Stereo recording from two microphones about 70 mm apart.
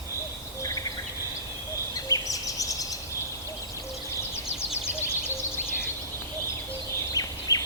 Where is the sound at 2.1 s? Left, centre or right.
Left.